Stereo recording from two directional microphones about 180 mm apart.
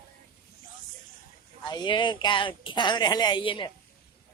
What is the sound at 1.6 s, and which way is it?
Speech, 25° left (ahead or behind).